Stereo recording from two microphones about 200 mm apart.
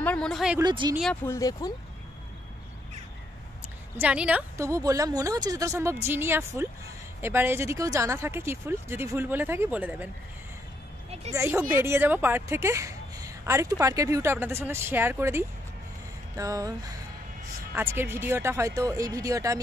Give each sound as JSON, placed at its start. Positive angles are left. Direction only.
{"t": 0.0, "sound": "speech", "side_deg": 5}
{"t": 0.6, "sound": "speech", "side_deg": -20}
{"t": 1.2, "sound": "speech", "side_deg": 15}
{"t": 4.0, "sound": "a woman's voice", "side_deg": -5}
{"t": 11.3, "sound": "a woman's voice", "side_deg": -15}